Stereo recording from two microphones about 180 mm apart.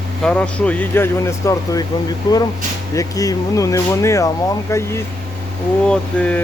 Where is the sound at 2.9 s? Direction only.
20° left (ahead or behind).